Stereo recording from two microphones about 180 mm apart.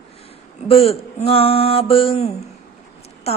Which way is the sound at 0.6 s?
35° left (ahead or behind).